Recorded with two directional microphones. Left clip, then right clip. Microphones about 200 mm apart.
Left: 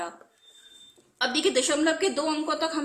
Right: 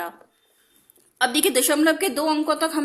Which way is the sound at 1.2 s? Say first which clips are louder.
Right 4 dB; 40° right (ahead or behind).